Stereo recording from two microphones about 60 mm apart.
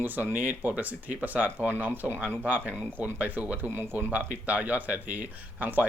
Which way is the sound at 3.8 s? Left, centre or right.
Right.